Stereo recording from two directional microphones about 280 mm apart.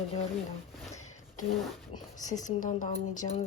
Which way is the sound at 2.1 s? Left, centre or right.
Left.